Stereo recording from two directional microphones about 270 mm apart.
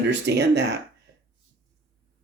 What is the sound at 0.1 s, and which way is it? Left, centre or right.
Speech, right.